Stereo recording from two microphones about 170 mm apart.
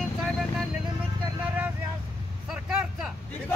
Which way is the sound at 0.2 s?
Centre (ahead or behind).